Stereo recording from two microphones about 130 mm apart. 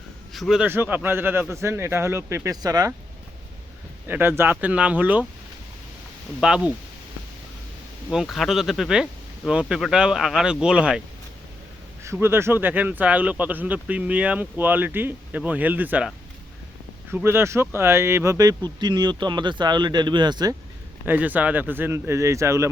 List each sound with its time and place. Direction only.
0.3 s speech: centre (ahead or behind)
0.6 s speech: 15° right (ahead or behind)
4.0 s speech: 15° right (ahead or behind)
6.4 s speech: 5° right (ahead or behind)
8.1 s speech: centre (ahead or behind)
12.0 s speech: 20° right (ahead or behind)
17.1 s speech: 15° right (ahead or behind); by 20.6 s 30° right (ahead or behind)
21.0 s speech: 15° right (ahead or behind)